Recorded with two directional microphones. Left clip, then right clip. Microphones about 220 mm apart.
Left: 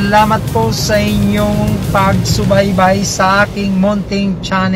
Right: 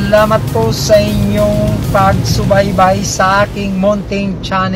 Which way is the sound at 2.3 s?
20° left (ahead or behind).